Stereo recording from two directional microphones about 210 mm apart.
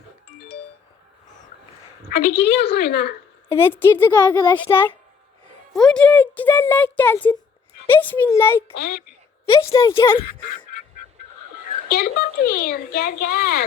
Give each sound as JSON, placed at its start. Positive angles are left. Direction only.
{"t": 2.0, "sound": "a child's voice", "side_deg": 55}
{"t": 3.5, "sound": "speech", "side_deg": 10}
{"t": 8.7, "sound": "a child's voice", "side_deg": 50}
{"t": 9.5, "sound": "a woman's voice", "side_deg": 25}
{"t": 11.9, "sound": "a child's voice", "side_deg": 45}